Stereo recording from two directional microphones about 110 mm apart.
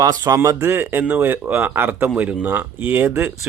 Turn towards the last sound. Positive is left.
turn(degrees=-20)  # may be behind; listen again after turning